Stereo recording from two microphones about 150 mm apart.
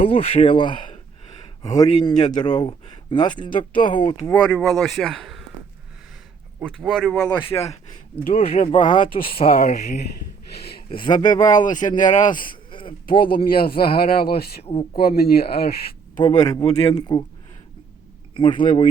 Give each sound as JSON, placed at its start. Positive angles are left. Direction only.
{"t": 0.0, "sound": "speech", "side_deg": 40}
{"t": 4.3, "sound": "speech", "side_deg": 5}
{"t": 6.7, "sound": "speech", "side_deg": 0}
{"t": 7.5, "sound": "speech", "side_deg": 45}
{"t": 9.6, "sound": "speech", "side_deg": 50}
{"t": 10.5, "sound": "a sound", "side_deg": 90}
{"t": 11.1, "sound": "speech", "side_deg": 55}
{"t": 12.7, "sound": "a sound", "side_deg": 35}
{"t": 13.6, "sound": "speech", "side_deg": 85}
{"t": 14.6, "sound": "speech", "side_deg": 40}
{"t": 14.9, "sound": "speech", "side_deg": 90}
{"t": 16.4, "sound": "speech", "side_deg": 25}
{"t": 18.3, "sound": "speech", "side_deg": 35}